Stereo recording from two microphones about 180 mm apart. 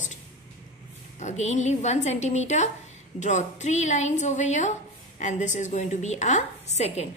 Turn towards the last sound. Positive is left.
turn(degrees=35)  # may be behind; listen again after turning